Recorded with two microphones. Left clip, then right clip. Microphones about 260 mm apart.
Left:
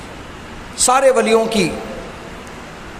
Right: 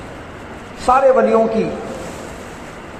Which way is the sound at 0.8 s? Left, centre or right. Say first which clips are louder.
Right 1 dB; left.